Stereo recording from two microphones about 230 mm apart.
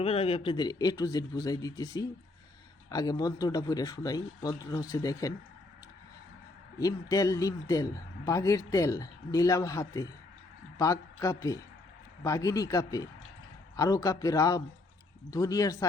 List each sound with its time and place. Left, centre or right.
0.0 s a man's voice: left
6.7 s a man's voice: centre